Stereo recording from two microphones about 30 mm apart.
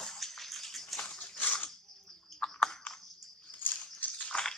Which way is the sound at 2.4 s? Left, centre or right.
Left.